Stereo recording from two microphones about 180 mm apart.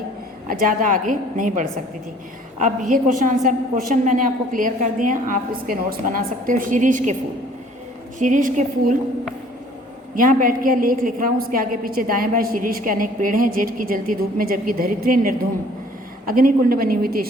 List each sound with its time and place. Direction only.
0.4 s a woman's voice: 50° right (ahead or behind)
8.2 s a woman's voice: 45° right (ahead or behind)
10.2 s a woman's voice: 50° right (ahead or behind)